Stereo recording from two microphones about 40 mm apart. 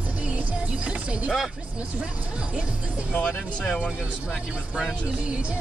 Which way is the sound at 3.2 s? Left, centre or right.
Left.